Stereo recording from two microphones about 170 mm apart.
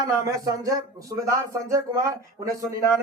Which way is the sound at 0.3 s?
20° right (ahead or behind).